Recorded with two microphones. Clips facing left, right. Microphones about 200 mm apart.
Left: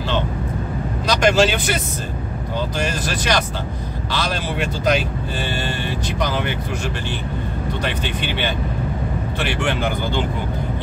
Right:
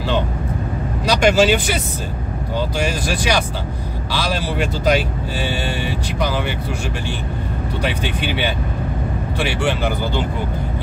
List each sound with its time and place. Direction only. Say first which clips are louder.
1.0 s speech: right 2 dB; 10° right (ahead or behind)
2.8 s speech: right 2 dB; 10° right (ahead or behind)
7.8 s speech: right 5 dB; 10° right (ahead or behind)